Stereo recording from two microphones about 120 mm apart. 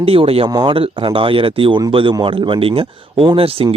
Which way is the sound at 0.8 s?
50° right (ahead or behind).